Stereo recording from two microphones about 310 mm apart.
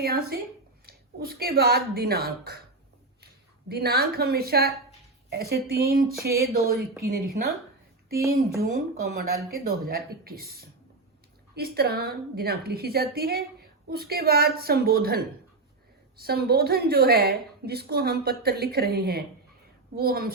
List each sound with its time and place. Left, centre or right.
0.0 s a woman's voice: right
3.7 s a woman's voice: right
6.7 s a woman's voice: centre
8.6 s a woman's voice: right
16.2 s a woman's voice: right